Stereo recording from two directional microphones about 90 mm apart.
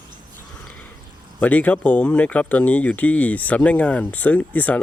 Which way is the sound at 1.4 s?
15° left (ahead or behind).